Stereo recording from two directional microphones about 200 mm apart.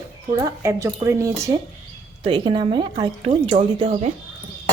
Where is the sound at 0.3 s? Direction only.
15° right (ahead or behind).